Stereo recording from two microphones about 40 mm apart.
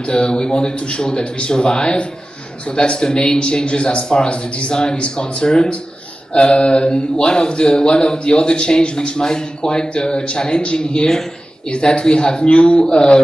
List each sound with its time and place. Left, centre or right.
0.0 s speech: left